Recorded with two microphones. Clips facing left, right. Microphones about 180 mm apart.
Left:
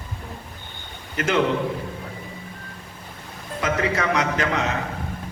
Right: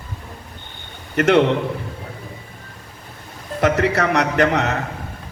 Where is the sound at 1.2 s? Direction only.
70° right (ahead or behind).